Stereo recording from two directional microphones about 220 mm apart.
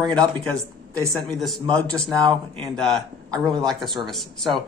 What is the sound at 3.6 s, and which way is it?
Speech, centre (ahead or behind).